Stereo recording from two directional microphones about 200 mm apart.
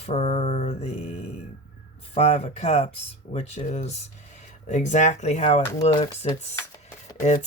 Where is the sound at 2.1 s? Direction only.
30° left (ahead or behind).